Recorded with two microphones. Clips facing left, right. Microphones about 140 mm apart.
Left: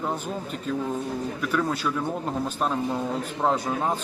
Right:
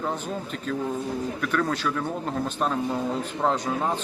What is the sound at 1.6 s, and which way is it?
Speech, 10° left (ahead or behind).